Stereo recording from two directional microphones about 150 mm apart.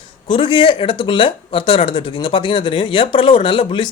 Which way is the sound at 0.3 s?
35° left (ahead or behind).